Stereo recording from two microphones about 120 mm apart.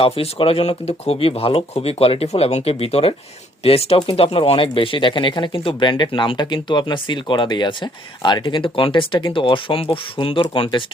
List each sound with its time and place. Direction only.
0.0 s speech: 50° left (ahead or behind)